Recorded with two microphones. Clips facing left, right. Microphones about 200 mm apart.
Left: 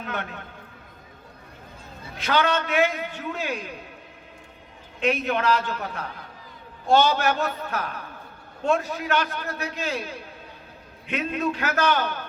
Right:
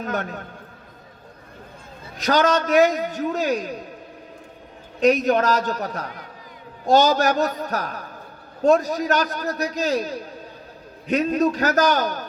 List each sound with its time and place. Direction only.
0.0 s a man's voice: 40° right (ahead or behind)
2.1 s a man's voice: 40° right (ahead or behind)
4.9 s a man's voice: 40° right (ahead or behind)